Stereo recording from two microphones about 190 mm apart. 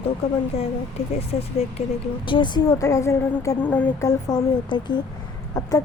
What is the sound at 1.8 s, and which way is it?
A woman's voice, 35° left (ahead or behind).